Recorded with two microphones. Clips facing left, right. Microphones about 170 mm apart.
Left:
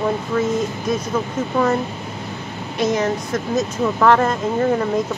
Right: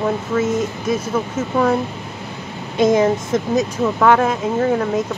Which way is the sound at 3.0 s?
20° right (ahead or behind).